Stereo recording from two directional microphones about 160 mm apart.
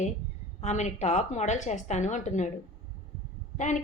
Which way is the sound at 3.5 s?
50° left (ahead or behind).